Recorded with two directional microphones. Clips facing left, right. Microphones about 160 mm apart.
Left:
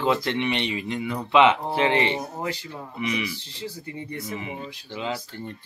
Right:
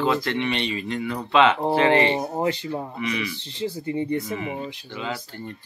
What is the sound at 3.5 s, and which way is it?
Speech, 25° right (ahead or behind).